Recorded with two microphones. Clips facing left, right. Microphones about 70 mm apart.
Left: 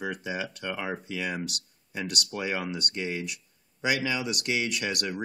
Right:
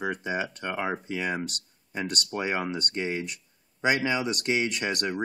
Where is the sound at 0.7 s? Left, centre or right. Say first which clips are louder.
Right 2 dB; centre.